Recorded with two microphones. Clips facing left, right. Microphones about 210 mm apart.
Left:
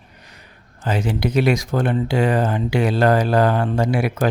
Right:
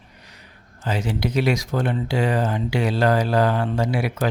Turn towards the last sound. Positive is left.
turn(degrees=50)  # may be behind; listen again after turning